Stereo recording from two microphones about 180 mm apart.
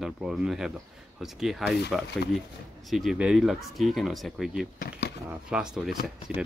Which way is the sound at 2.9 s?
Centre (ahead or behind).